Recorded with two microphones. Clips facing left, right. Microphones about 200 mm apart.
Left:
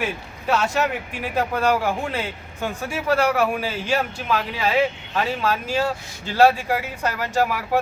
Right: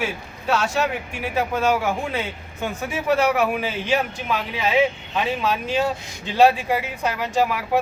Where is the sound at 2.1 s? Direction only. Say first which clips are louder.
Right 1 dB; 15° right (ahead or behind).